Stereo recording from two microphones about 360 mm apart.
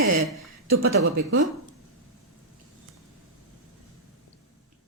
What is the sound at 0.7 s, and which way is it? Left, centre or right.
Speech, right.